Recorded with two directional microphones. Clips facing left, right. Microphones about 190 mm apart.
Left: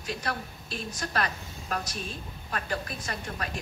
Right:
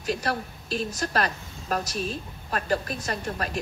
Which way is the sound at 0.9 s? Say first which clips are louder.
Even; 45° right (ahead or behind).